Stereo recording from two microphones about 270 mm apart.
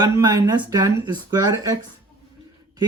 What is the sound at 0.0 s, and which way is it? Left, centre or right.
Speech, centre.